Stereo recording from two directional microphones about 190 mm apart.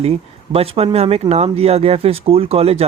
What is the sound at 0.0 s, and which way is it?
Speech, 30° right (ahead or behind).